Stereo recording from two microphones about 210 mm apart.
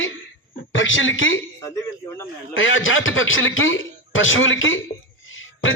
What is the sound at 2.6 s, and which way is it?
Speech, 70° left (ahead or behind).